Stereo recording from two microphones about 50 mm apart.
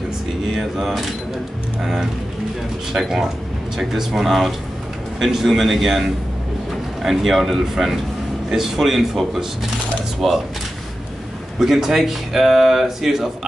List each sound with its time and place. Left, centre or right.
0.6 s speech: centre
11.6 s speech: centre